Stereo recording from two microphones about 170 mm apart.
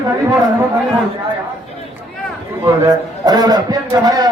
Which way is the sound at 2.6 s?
25° right (ahead or behind).